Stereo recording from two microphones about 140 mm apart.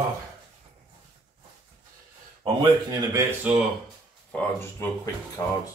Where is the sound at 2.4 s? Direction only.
35° right (ahead or behind).